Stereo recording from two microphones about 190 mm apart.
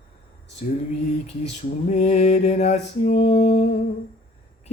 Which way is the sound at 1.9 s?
35° left (ahead or behind).